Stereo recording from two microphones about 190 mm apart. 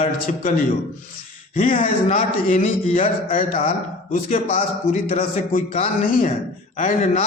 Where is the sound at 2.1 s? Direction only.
45° left (ahead or behind).